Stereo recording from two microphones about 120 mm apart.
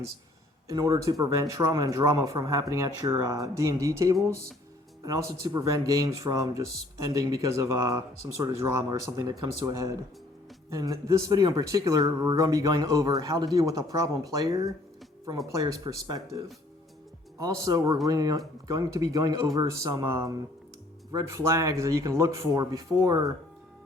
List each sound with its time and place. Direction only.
0.7 s speech: 30° right (ahead or behind)